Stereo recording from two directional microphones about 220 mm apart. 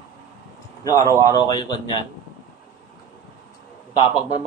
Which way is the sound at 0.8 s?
15° left (ahead or behind).